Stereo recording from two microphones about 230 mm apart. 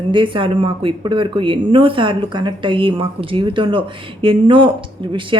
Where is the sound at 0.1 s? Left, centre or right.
Right.